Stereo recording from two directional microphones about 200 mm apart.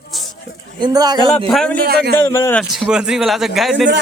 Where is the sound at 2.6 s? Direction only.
Centre (ahead or behind).